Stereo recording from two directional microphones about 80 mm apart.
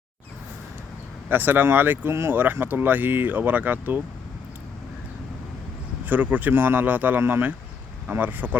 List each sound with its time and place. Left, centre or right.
1.3 s speech: right
6.1 s speech: right